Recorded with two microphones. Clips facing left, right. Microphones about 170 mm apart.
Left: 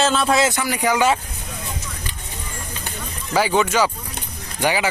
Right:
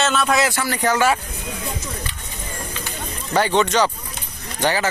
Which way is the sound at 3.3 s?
5° left (ahead or behind).